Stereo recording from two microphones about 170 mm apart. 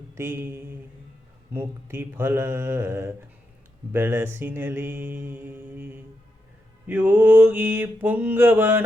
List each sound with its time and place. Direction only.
0.1 s mantra: 15° right (ahead or behind)